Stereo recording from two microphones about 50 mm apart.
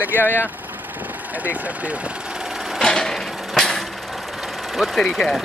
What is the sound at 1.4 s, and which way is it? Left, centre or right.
Speech, right.